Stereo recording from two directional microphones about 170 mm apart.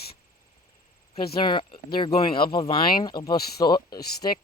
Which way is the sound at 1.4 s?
30° left (ahead or behind).